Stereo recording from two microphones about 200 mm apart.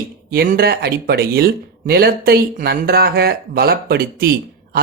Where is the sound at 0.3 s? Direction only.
50° right (ahead or behind).